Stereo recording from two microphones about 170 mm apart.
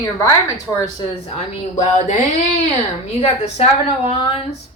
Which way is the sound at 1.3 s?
40° left (ahead or behind).